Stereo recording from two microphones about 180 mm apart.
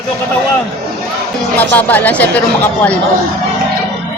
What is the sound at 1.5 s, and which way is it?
Speech, 10° left (ahead or behind).